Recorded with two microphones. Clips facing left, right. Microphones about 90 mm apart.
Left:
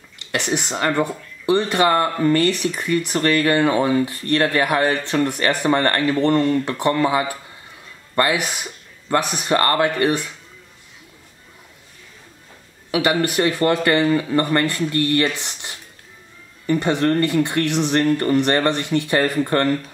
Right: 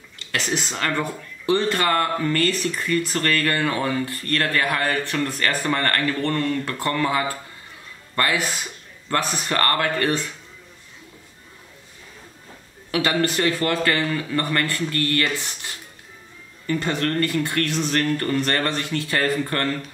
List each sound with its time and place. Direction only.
0.6 s speech: 15° left (ahead or behind)
12.9 s speech: 15° left (ahead or behind)